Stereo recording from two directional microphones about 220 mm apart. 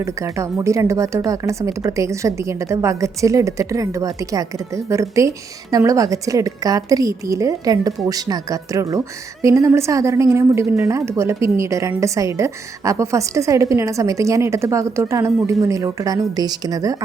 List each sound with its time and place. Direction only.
0.0 s a woman's voice: 15° right (ahead or behind)